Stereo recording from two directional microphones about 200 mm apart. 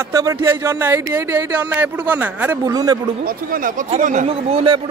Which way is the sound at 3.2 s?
45° right (ahead or behind).